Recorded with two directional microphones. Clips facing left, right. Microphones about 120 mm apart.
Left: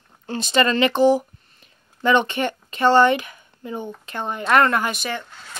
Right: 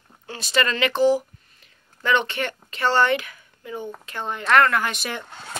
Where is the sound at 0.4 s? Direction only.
25° left (ahead or behind).